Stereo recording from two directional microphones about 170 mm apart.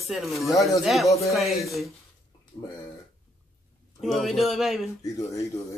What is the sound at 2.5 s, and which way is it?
Speech, 15° left (ahead or behind).